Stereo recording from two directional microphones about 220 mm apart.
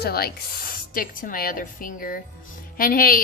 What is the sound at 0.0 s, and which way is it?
A woman's voice, 45° left (ahead or behind).